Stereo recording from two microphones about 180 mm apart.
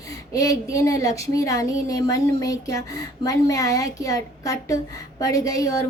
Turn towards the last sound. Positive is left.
turn(degrees=20)  # may be behind; listen again after turning